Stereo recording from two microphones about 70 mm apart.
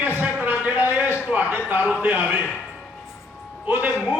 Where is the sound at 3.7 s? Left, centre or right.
Right.